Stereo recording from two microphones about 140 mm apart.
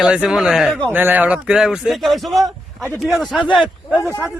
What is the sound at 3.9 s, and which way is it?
Speech, 20° left (ahead or behind).